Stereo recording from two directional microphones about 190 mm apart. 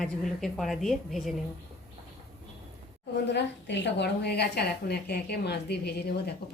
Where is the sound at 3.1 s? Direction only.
65° left (ahead or behind).